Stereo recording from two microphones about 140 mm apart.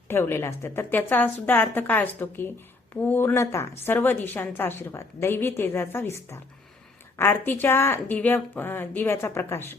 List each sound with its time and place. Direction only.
0.1 s a woman's voice: 15° left (ahead or behind)
7.2 s a woman's voice: 15° left (ahead or behind)